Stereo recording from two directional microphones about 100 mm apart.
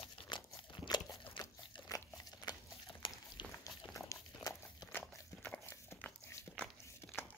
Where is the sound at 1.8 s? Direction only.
35° left (ahead or behind); by 3.4 s 55° left (ahead or behind).